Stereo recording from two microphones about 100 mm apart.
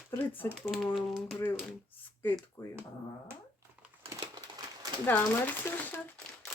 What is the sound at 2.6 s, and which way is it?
Speech, 20° left (ahead or behind).